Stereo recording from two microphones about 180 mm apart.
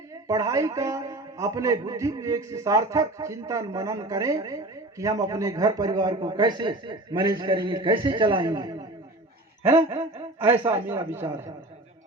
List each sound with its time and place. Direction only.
0.3 s a man's voice: 20° right (ahead or behind)
10.4 s a man's voice: 10° right (ahead or behind)